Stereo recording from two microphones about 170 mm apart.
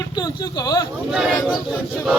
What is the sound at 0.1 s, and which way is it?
Speech, 25° left (ahead or behind).